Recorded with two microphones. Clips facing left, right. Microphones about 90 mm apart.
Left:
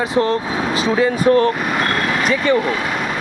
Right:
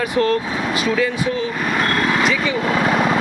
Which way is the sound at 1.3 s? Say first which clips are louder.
Left 9 dB; 60° left (ahead or behind).